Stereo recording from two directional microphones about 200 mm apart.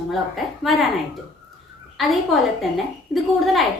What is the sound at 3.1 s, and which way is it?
Speech, centre (ahead or behind).